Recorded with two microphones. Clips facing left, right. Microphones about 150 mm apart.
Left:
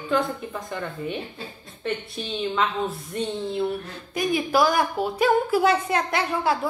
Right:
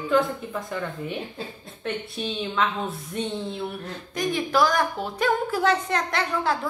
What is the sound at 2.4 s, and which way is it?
A woman's voice, centre (ahead or behind).